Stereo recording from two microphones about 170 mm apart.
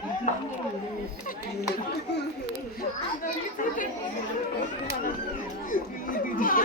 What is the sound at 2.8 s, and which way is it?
Speech, 55° left (ahead or behind).